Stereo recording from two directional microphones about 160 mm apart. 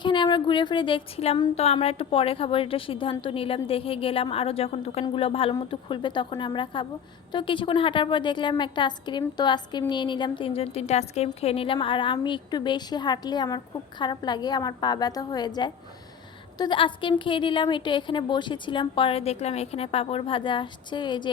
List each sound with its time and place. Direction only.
0.0 s a woman's voice: 30° left (ahead or behind)